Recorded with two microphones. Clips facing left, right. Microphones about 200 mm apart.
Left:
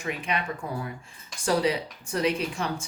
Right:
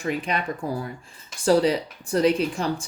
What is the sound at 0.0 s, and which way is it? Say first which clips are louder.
Speech: right 4 dB; 35° right (ahead or behind).